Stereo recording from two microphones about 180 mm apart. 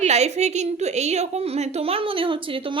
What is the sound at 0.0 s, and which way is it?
A woman's voice, 40° right (ahead or behind).